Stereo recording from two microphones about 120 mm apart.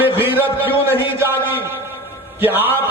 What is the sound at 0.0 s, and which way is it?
Speech, 15° right (ahead or behind).